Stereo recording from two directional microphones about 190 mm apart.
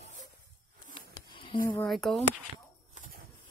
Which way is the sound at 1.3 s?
25° left (ahead or behind).